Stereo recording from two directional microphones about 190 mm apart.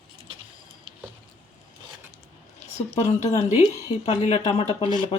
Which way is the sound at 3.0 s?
35° left (ahead or behind).